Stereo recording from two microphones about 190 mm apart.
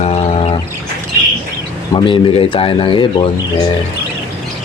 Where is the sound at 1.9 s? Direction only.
25° left (ahead or behind).